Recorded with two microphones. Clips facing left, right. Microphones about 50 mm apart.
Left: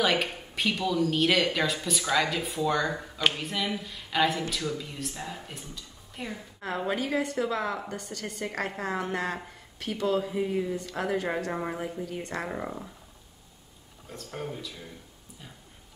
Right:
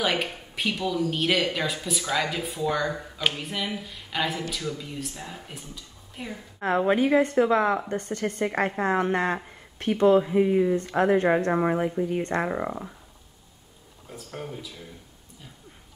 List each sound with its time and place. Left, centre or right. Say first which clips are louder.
0.0 s speech: even; centre
6.8 s a woman's voice: right 8 dB; right
14.0 s speech: even; centre